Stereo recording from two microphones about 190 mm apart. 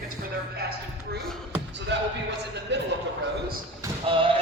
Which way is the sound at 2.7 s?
65° right (ahead or behind).